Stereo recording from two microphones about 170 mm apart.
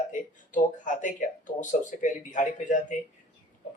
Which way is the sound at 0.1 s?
50° left (ahead or behind).